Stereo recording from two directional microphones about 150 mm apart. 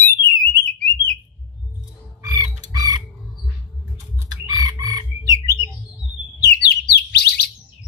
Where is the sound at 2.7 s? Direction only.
25° right (ahead or behind).